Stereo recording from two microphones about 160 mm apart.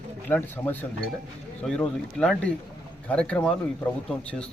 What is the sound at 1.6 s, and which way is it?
Speech, 5° left (ahead or behind).